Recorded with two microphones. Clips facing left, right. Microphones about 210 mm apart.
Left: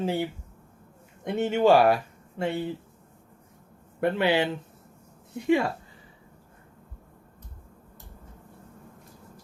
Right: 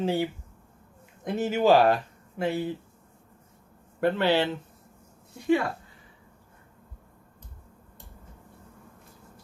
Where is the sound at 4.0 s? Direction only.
15° left (ahead or behind).